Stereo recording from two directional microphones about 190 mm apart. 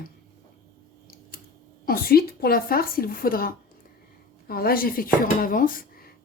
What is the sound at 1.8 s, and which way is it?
Speech, 50° left (ahead or behind).